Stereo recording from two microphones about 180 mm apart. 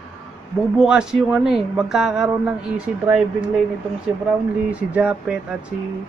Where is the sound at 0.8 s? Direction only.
5° right (ahead or behind).